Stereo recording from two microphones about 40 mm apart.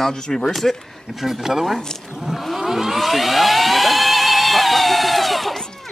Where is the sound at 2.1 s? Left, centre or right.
Centre.